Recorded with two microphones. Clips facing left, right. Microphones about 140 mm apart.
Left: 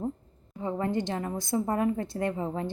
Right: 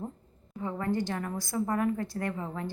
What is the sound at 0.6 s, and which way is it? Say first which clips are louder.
Speech: left 2 dB; 25° left (ahead or behind).